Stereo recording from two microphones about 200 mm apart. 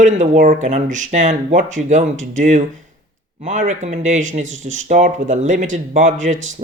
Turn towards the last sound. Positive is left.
turn(degrees=-40)  # may be behind; listen again after turning